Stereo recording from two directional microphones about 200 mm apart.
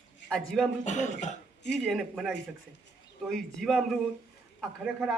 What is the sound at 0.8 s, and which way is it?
Speech, 35° left (ahead or behind).